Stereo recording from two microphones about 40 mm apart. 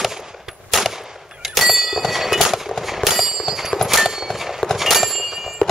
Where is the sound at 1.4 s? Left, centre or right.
Centre.